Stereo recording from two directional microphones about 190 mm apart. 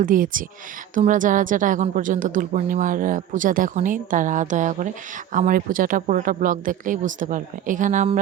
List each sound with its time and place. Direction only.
0.0 s a woman's voice: 45° right (ahead or behind)